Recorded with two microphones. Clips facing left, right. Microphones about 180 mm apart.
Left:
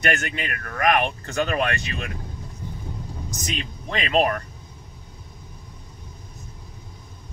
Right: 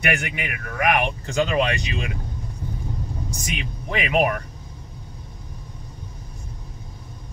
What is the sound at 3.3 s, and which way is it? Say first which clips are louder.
Speech: left 3 dB; 10° right (ahead or behind).